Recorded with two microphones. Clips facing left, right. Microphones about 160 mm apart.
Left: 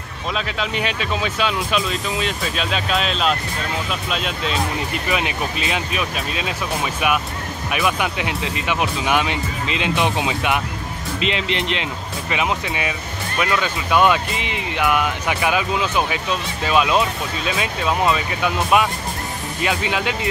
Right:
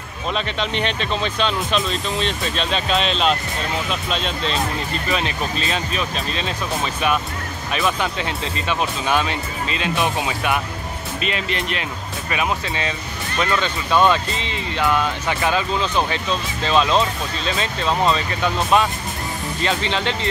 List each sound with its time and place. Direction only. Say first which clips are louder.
0.3 s speech: right 1 dB; 5° left (ahead or behind)